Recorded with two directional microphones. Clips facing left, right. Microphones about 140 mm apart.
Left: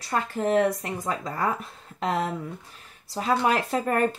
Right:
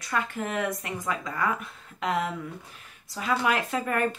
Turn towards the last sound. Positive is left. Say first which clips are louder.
# left 3 dB
turn(degrees=35)  # may be behind; listen again after turning